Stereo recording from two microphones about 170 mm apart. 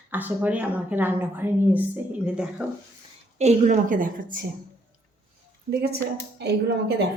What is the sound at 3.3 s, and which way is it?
A woman's voice, 45° right (ahead or behind).